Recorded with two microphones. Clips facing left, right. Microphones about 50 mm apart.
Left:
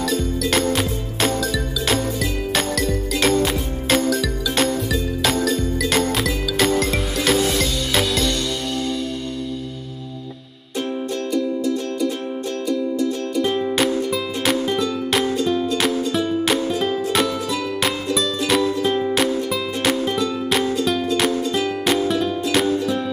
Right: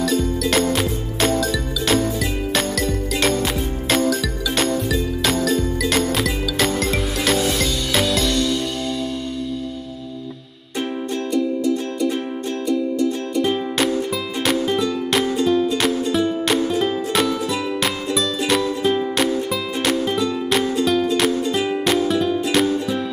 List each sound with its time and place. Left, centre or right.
0.0 s music: centre
11.3 s music: centre
13.4 s music: centre
18.5 s music: centre
21.5 s music: centre
21.8 s music: centre